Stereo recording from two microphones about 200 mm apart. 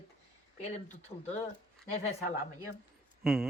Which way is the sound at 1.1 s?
30° left (ahead or behind).